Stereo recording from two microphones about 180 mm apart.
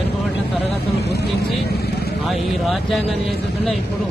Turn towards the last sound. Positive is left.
turn(degrees=0)  # may be behind; listen again after turning